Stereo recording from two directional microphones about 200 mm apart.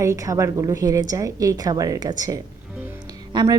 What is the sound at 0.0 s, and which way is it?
A woman's voice, 15° right (ahead or behind).